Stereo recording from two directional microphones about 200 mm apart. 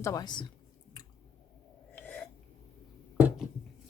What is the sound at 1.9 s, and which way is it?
Gasp, 10° left (ahead or behind).